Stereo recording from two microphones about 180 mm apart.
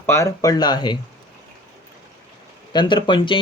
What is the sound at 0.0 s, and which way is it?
Speech, 15° left (ahead or behind).